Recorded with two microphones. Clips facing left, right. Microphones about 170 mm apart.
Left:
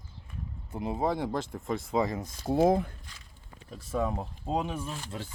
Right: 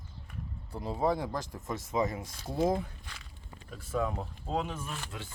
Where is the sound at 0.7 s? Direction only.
20° left (ahead or behind).